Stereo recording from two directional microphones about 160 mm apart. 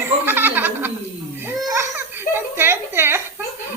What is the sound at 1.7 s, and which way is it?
Giggle, 15° right (ahead or behind).